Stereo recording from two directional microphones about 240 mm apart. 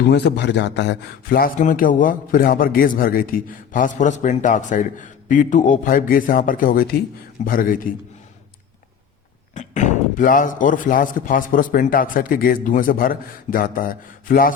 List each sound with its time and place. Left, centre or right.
0.1 s a man's voice: left
9.6 s a man's voice: left